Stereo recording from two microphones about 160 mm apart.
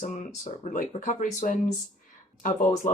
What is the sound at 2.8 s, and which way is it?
Speech, 55° left (ahead or behind).